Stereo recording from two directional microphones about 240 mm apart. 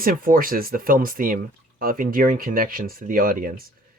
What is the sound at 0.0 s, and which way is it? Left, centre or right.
Speech, right.